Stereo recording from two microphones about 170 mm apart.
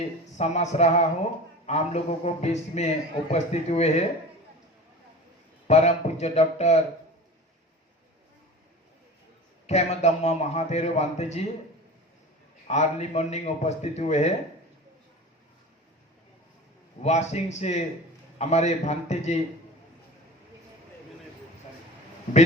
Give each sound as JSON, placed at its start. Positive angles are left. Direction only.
{"t": 0.3, "sound": "a man's voice", "side_deg": 40}
{"t": 5.6, "sound": "a man's voice", "side_deg": 40}
{"t": 9.6, "sound": "a man's voice", "side_deg": 40}
{"t": 12.6, "sound": "a man's voice", "side_deg": 40}
{"t": 17.0, "sound": "a man's voice", "side_deg": 40}